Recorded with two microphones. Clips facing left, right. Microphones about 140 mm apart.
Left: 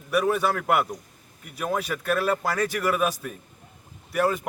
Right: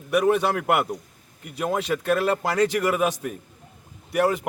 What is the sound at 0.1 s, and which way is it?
A man's voice, 15° right (ahead or behind).